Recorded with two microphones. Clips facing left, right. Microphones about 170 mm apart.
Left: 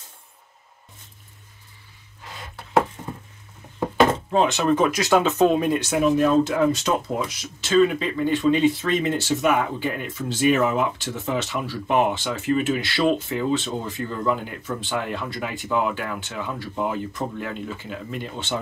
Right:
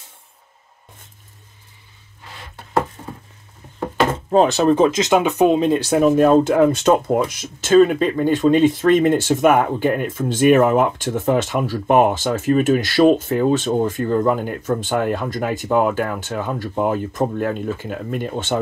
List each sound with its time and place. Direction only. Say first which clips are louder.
4.3 s speech: right 5 dB; 40° right (ahead or behind)
6.0 s speech: right 5 dB; 50° right (ahead or behind)